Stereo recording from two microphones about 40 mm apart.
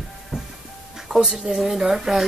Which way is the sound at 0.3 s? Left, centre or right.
Centre.